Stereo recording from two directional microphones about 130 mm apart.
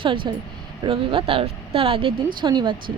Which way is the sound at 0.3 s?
35° right (ahead or behind).